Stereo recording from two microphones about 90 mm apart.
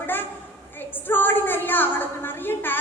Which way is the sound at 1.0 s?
20° left (ahead or behind).